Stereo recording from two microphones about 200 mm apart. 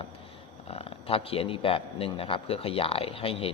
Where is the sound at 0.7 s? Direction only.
30° left (ahead or behind).